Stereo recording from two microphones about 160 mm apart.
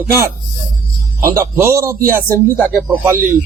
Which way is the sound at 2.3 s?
10° left (ahead or behind).